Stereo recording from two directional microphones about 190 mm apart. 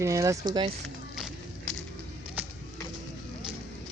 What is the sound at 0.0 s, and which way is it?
Speech, 15° right (ahead or behind).